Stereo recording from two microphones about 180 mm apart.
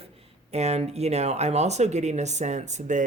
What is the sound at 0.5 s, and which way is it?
Speech, 35° right (ahead or behind).